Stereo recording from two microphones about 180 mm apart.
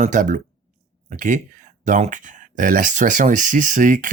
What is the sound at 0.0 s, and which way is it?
Speech, 45° right (ahead or behind).